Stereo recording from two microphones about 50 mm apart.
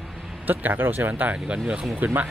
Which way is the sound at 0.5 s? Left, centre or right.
Right.